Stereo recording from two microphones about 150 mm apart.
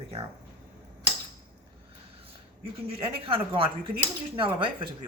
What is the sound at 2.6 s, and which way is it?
Speech, 40° right (ahead or behind).